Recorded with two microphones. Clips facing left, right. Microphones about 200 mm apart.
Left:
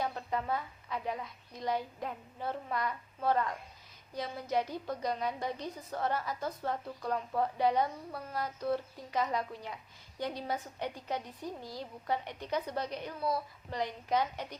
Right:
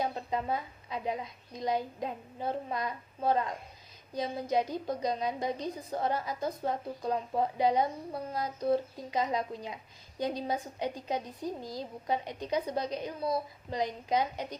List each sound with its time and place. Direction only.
0.0 s a woman's voice: 20° right (ahead or behind)